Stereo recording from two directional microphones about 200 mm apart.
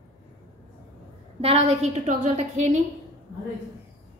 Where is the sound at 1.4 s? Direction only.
30° right (ahead or behind).